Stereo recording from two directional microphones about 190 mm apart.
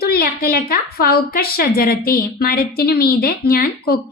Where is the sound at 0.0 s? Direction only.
55° left (ahead or behind).